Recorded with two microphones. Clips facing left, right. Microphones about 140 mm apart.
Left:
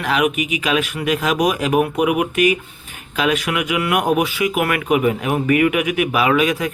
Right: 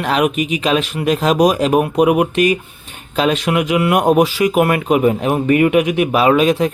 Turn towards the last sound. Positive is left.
turn(degrees=-30)  # may be behind; listen again after turning